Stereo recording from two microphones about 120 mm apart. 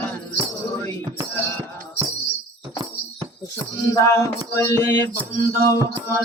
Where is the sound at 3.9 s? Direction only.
25° left (ahead or behind).